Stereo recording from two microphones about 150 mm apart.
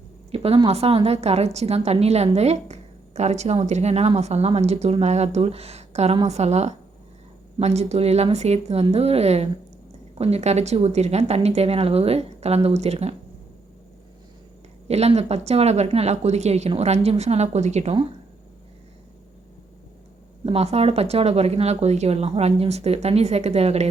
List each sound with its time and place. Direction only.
0.3 s speech: 40° right (ahead or behind)
14.8 s speech: 45° right (ahead or behind)
20.4 s speech: 40° right (ahead or behind)